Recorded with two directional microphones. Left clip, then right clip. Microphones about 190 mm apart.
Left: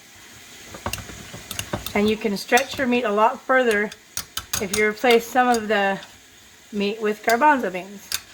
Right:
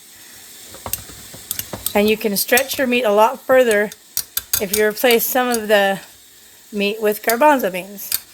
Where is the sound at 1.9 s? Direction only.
50° right (ahead or behind).